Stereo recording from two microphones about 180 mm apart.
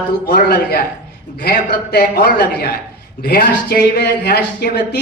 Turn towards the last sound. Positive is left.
turn(degrees=65)  # may be behind; listen again after turning